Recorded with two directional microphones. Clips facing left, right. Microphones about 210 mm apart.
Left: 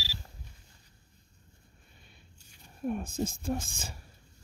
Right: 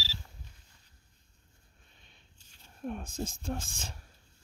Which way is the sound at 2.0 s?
10° left (ahead or behind).